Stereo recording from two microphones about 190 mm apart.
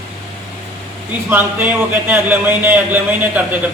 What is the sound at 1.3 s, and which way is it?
A man's voice, 10° right (ahead or behind).